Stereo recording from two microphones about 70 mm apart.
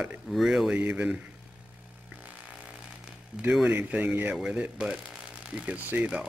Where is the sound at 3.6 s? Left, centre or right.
Right.